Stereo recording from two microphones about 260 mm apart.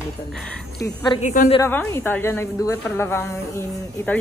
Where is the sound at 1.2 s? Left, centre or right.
Left.